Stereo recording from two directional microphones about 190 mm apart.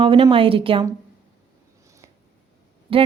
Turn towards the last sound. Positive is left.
turn(degrees=-30)  # may be behind; listen again after turning